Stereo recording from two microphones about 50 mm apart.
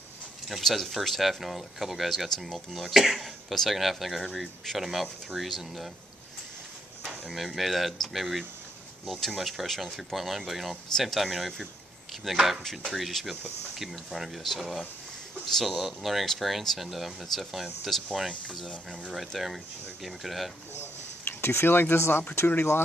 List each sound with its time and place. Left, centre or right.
0.5 s speech: centre
7.1 s speech: centre
19.1 s speech: centre
21.2 s speech: left